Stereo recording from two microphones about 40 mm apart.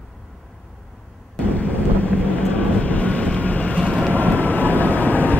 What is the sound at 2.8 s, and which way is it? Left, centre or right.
Vehicle, left.